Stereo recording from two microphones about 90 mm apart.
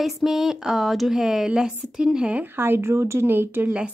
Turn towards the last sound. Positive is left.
turn(degrees=-25)  # may be behind; listen again after turning